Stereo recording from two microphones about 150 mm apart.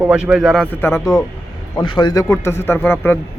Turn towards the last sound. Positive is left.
turn(degrees=15)  # may be behind; listen again after turning